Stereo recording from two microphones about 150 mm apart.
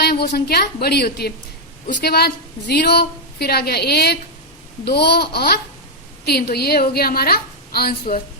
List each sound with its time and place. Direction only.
0.0 s a woman's voice: 90° left